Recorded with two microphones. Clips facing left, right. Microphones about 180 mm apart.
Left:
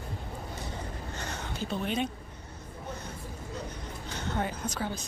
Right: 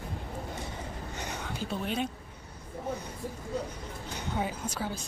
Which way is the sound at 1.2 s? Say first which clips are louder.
Right 1 dB; 15° right (ahead or behind).